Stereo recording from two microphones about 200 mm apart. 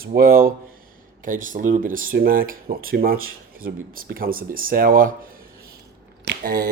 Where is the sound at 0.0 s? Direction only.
50° right (ahead or behind).